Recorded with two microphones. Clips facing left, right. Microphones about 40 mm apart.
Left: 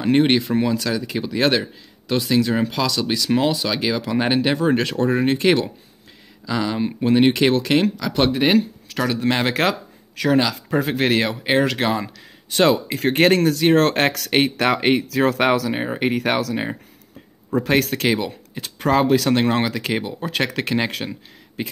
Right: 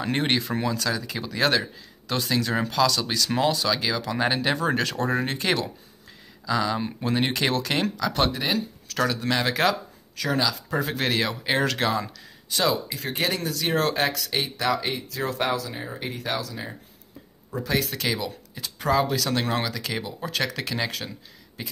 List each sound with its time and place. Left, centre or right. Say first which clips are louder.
0.0 s speech: left 8 dB; centre; by 8.6 s left
8.8 s speech: left 4 dB; left
12.5 s speech: left 7 dB; left
13.6 s speech: left 9 dB; left
13.8 s speech: left 5 dB; left
17.6 s speech: left 6 dB; left
18.0 s speech: left 7 dB; left